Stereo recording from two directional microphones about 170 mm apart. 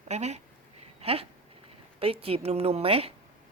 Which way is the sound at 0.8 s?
35° right (ahead or behind).